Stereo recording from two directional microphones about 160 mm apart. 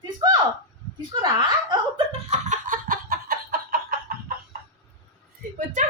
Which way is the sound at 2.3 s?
50° right (ahead or behind).